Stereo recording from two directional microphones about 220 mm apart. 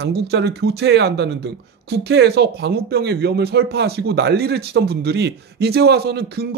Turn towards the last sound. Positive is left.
turn(degrees=-45)  # may be behind; listen again after turning